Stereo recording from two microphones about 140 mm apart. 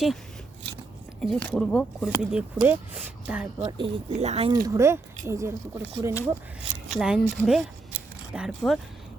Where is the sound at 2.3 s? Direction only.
10° right (ahead or behind).